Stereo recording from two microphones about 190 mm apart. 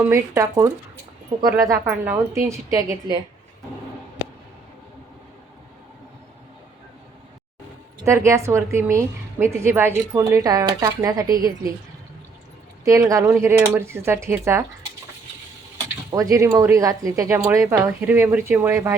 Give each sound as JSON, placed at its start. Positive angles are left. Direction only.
{"t": 0.0, "sound": "a woman's voice", "side_deg": -15}
{"t": 8.0, "sound": "a woman's voice", "side_deg": -15}
{"t": 12.8, "sound": "a woman's voice", "side_deg": -15}
{"t": 16.1, "sound": "a woman's voice", "side_deg": -15}